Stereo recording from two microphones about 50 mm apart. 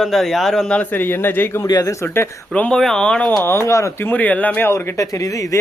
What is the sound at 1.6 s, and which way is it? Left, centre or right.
Speech, left.